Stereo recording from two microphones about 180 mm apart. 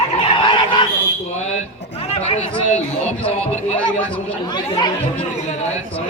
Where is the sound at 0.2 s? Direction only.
30° left (ahead or behind).